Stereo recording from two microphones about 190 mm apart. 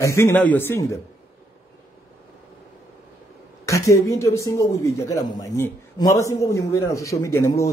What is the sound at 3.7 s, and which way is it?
Speech, 15° left (ahead or behind).